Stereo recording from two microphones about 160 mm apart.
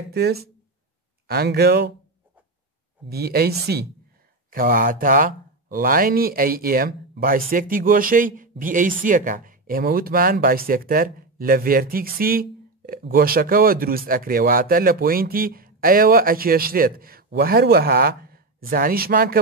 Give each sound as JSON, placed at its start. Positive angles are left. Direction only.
{"t": 0.1, "sound": "speech", "side_deg": -80}
{"t": 3.1, "sound": "speech", "side_deg": -75}
{"t": 4.5, "sound": "speech", "side_deg": -60}